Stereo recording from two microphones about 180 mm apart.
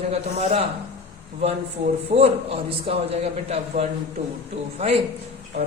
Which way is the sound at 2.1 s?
35° right (ahead or behind).